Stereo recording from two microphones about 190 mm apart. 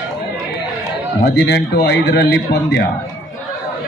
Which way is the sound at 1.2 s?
60° left (ahead or behind).